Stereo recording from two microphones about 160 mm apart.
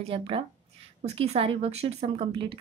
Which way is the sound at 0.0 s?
35° right (ahead or behind).